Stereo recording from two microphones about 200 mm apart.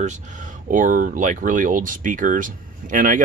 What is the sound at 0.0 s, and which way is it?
Speech, 40° right (ahead or behind).